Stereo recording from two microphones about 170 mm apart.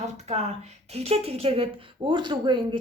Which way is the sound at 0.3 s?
40° right (ahead or behind).